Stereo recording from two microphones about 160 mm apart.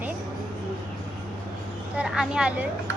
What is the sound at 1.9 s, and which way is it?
Speech, 5° right (ahead or behind).